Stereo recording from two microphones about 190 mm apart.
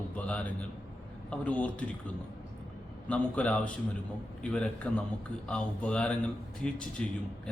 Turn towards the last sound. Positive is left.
turn(degrees=5)  # may be behind; listen again after turning